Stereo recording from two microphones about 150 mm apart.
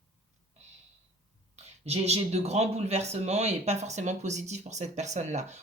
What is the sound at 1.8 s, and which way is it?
Speech, 45° right (ahead or behind).